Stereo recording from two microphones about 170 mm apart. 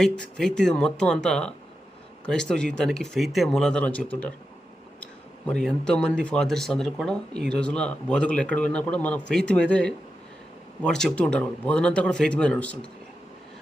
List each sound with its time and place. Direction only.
0.0 s speech: 5° left (ahead or behind)
5.5 s speech: 5° left (ahead or behind)